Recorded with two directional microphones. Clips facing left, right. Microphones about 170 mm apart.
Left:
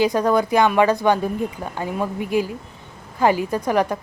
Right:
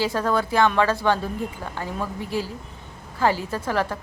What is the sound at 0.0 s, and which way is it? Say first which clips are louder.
Speech: left 5 dB; 15° left (ahead or behind).